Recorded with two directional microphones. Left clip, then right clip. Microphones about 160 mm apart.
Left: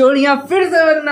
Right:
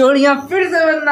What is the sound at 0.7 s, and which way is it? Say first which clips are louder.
Speech: left 3 dB; 10° left (ahead or behind).